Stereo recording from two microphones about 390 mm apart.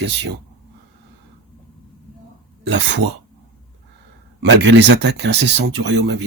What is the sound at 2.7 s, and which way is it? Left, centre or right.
Speech, right.